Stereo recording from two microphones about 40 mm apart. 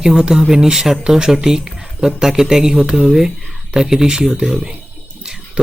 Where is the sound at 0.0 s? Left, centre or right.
Centre.